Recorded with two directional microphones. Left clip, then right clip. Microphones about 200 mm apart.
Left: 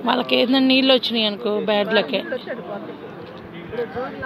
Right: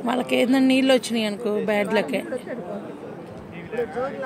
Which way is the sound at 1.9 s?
35° right (ahead or behind).